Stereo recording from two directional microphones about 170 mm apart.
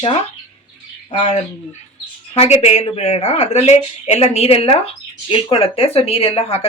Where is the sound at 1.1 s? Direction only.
45° left (ahead or behind).